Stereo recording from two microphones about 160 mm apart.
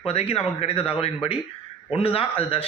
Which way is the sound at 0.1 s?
40° left (ahead or behind).